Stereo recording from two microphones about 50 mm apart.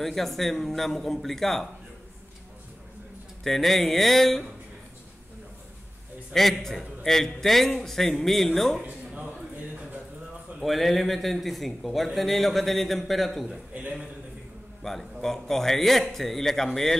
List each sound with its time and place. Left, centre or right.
0.0 s a man's voice: centre
3.4 s a man's voice: centre
6.3 s speech: centre
8.8 s a sound: right
10.6 s a man's voice: centre
14.8 s a man's voice: centre